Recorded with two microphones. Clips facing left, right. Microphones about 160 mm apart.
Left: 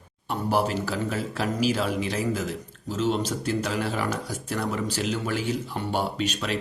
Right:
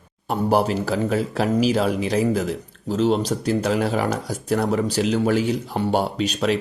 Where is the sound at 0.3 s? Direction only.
40° right (ahead or behind).